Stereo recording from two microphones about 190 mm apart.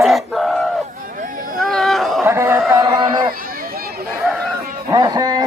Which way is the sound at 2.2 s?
15° right (ahead or behind).